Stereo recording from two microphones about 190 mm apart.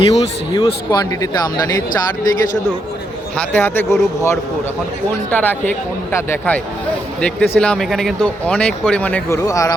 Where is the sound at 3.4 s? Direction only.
10° left (ahead or behind).